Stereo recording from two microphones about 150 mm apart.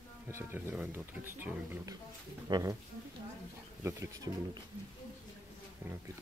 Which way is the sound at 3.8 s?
25° right (ahead or behind).